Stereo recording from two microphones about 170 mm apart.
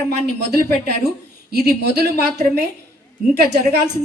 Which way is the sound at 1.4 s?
70° right (ahead or behind).